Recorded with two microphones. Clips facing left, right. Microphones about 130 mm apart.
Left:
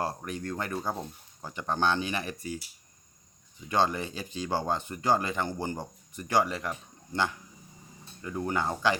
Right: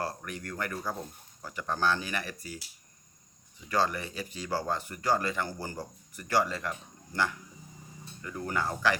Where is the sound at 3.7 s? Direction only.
25° left (ahead or behind).